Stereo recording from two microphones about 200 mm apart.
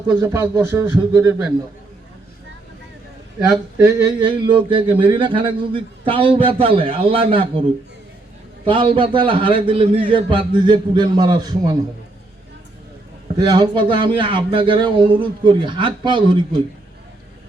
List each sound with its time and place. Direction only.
0.1 s a man's voice: 15° right (ahead or behind)
3.9 s speech: 25° right (ahead or behind)
8.6 s speech: 25° right (ahead or behind)
13.3 s speech: 20° right (ahead or behind)